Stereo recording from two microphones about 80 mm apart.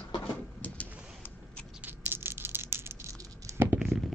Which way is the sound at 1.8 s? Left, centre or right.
Right.